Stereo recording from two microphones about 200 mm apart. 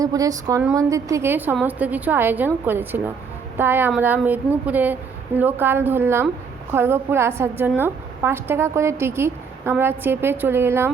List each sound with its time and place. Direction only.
0.0 s a woman's voice: 15° right (ahead or behind)